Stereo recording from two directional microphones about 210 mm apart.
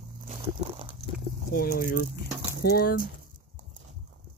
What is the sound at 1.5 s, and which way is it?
Speech, 45° left (ahead or behind).